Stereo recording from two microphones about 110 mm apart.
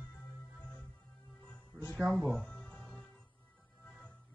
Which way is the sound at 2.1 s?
10° left (ahead or behind).